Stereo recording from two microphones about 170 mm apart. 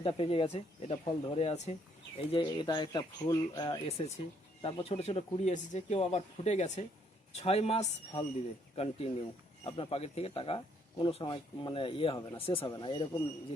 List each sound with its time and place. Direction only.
0.0 s speech: 35° left (ahead or behind)
4.6 s speech: 35° left (ahead or behind)